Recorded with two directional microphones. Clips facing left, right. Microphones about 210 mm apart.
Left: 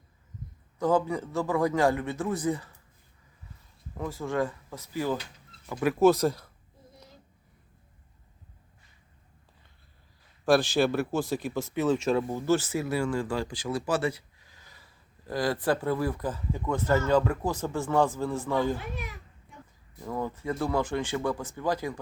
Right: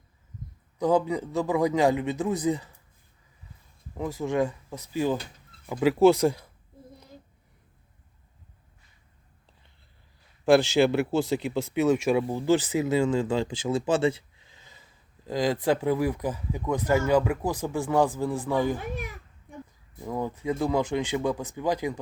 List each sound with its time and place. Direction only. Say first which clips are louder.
0.8 s speech: right 2 dB; 15° right (ahead or behind)
3.9 s speech: right 3 dB; 20° right (ahead or behind)
10.8 s speech: right 3 dB; 15° right (ahead or behind)
20.0 s speech: right 2 dB; 15° right (ahead or behind)